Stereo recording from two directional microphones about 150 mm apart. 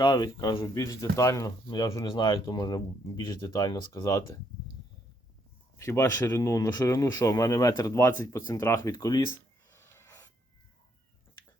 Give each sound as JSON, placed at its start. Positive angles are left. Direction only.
{"t": 0.0, "sound": "speech", "side_deg": 25}
{"t": 5.7, "sound": "speech", "side_deg": 15}
{"t": 9.3, "sound": "a sound", "side_deg": 15}